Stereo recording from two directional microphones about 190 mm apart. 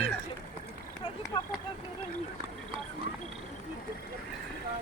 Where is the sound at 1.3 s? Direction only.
25° left (ahead or behind).